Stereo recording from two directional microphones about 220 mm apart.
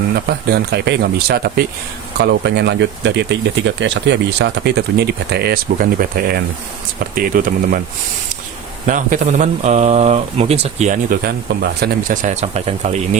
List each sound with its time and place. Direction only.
0.3 s speech: 45° right (ahead or behind)
8.9 s speech: 35° right (ahead or behind)